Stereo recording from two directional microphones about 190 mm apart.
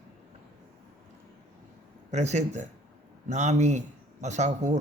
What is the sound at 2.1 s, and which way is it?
A man's voice, 35° right (ahead or behind).